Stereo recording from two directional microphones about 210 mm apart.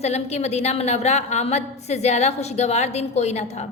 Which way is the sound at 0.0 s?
30° left (ahead or behind).